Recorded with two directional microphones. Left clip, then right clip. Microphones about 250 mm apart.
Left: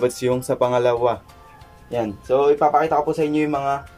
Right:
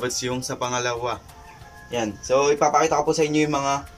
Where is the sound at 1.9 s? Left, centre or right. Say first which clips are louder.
Left 1 dB; centre.